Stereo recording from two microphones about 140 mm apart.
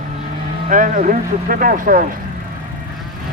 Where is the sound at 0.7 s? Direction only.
70° right (ahead or behind).